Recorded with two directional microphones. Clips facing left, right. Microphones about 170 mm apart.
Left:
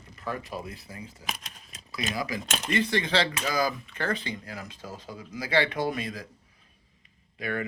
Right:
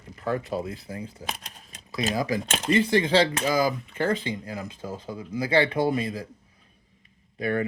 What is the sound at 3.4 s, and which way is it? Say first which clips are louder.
Speech: right 4 dB; 20° right (ahead or behind).